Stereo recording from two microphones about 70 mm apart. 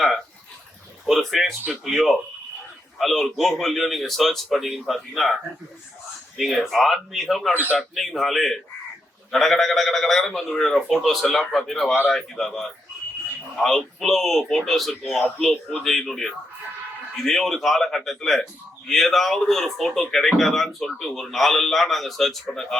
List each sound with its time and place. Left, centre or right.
1.0 s speech: centre
7.5 s a man's voice: right
7.8 s speech: centre